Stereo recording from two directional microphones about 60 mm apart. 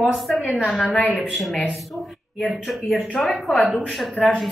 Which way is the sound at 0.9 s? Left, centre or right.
Left.